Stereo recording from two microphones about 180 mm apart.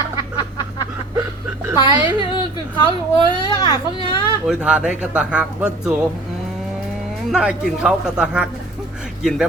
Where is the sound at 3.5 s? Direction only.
25° left (ahead or behind).